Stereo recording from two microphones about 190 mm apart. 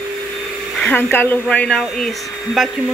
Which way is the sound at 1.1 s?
10° left (ahead or behind).